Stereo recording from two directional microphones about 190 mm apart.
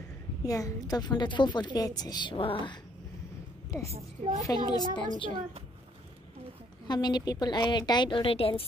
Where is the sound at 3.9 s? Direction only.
35° right (ahead or behind).